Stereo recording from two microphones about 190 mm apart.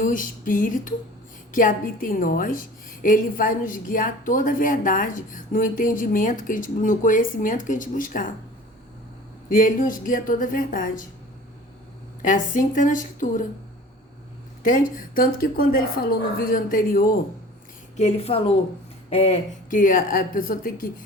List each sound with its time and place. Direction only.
0.0 s a woman's voice: 45° left (ahead or behind)
9.5 s a woman's voice: 45° left (ahead or behind)
12.2 s a woman's voice: 45° left (ahead or behind)
14.6 s a woman's voice: 45° left (ahead or behind)
17.9 s a woman's voice: 35° left (ahead or behind); by 20.9 s 50° left (ahead or behind)